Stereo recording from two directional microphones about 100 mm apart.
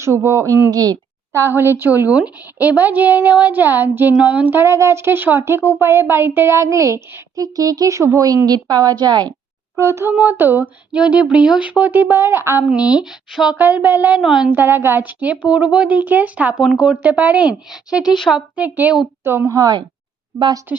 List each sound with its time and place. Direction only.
0.0 s speech: 30° right (ahead or behind)
1.8 s a woman's voice: 20° right (ahead or behind); by 9.2 s 45° right (ahead or behind)
9.7 s speech: 30° right (ahead or behind)
12.6 s a woman's voice: 10° right (ahead or behind)
13.6 s speech: 20° right (ahead or behind)
14.2 s a woman's voice: 5° right (ahead or behind)
14.5 s a woman's voice: 20° right (ahead or behind)
18.0 s speech: 50° left (ahead or behind)
18.3 s a woman's voice: 10° right (ahead or behind)
19.2 s speech: 25° right (ahead or behind)
20.7 s a woman's voice: 15° right (ahead or behind)